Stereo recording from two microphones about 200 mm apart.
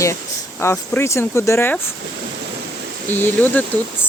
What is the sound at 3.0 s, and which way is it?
Speech, 10° left (ahead or behind).